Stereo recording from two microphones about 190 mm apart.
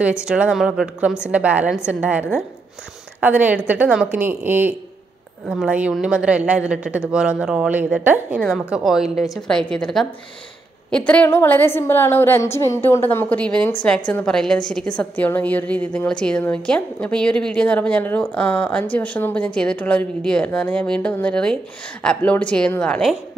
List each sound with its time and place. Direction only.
0.2 s a woman's voice: 5° right (ahead or behind)